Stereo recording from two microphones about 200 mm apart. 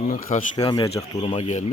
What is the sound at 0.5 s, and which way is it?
Speech, 20° left (ahead or behind).